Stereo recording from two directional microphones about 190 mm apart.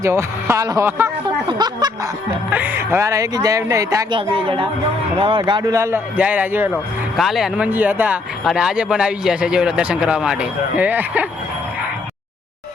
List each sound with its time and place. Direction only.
0.0 s speech: 15° right (ahead or behind)
2.5 s speech: 10° right (ahead or behind)